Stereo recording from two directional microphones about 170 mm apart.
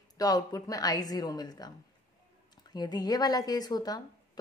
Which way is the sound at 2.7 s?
25° left (ahead or behind).